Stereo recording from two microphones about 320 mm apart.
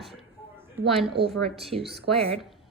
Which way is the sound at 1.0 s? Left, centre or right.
Centre.